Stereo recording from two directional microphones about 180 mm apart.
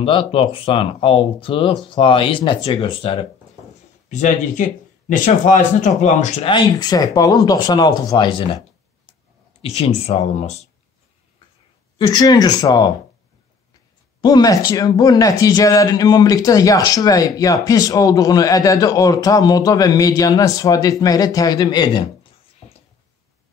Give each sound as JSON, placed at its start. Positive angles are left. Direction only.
{"t": 0.0, "sound": "a man's voice", "side_deg": 30}
{"t": 4.1, "sound": "a man's voice", "side_deg": 40}
{"t": 9.6, "sound": "speech", "side_deg": 35}
{"t": 12.0, "sound": "a man's voice", "side_deg": 20}
{"t": 14.2, "sound": "a man's voice", "side_deg": 20}